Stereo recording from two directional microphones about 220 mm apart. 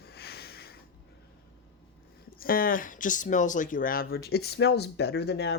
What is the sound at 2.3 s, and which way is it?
Speech, 40° left (ahead or behind).